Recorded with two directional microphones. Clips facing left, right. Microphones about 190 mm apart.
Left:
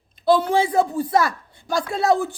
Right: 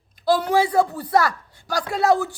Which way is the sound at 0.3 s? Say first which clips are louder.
Left 1 dB; 25° left (ahead or behind).